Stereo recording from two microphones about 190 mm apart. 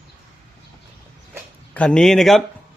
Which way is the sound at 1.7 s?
5° left (ahead or behind).